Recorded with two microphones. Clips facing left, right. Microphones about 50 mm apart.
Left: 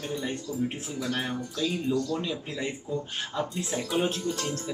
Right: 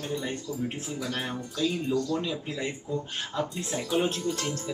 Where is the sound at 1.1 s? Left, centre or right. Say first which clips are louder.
Left 2 dB; centre.